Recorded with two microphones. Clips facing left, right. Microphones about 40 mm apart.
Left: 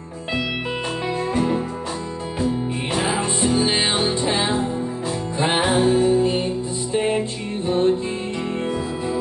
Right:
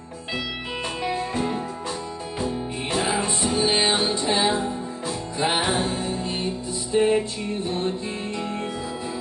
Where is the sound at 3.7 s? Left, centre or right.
Centre.